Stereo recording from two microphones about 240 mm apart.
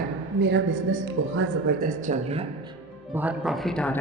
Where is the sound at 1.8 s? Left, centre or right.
Right.